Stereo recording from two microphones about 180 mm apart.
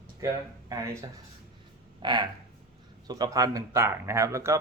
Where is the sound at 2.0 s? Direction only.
25° right (ahead or behind).